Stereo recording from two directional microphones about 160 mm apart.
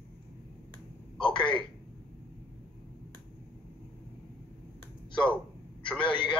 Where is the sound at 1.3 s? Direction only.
30° left (ahead or behind).